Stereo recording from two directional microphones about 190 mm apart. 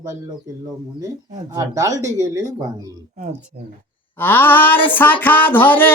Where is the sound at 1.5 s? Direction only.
20° right (ahead or behind).